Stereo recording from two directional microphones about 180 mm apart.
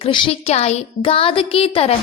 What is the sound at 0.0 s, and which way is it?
A woman's voice, 35° left (ahead or behind).